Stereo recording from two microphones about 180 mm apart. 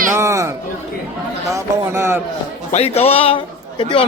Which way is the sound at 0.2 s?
15° right (ahead or behind).